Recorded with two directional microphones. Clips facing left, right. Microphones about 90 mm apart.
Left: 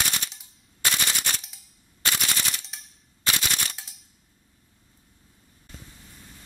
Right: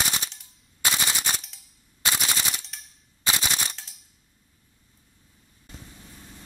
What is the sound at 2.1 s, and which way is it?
Machine gun, 5° right (ahead or behind).